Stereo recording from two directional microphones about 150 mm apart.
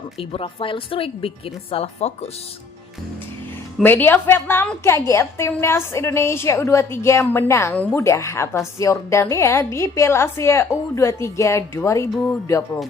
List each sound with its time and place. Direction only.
0.2 s a woman's voice: 40° left (ahead or behind)
3.8 s a woman's voice: 15° left (ahead or behind)